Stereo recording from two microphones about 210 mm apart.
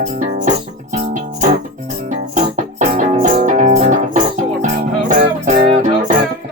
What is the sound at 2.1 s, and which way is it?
Music, 35° right (ahead or behind).